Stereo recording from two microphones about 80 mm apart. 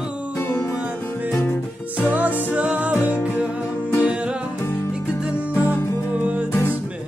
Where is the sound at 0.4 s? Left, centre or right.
Left.